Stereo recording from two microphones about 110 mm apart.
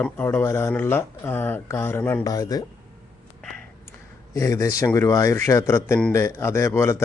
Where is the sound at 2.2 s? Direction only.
35° left (ahead or behind).